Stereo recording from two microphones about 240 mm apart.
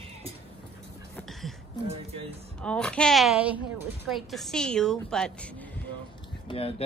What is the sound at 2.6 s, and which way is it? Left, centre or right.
Dog, centre.